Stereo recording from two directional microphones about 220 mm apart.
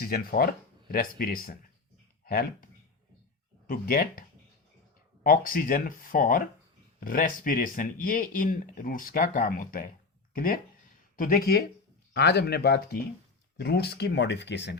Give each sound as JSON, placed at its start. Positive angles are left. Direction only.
{"t": 0.0, "sound": "speech", "side_deg": 40}
{"t": 3.7, "sound": "speech", "side_deg": 40}
{"t": 5.2, "sound": "speech", "side_deg": 40}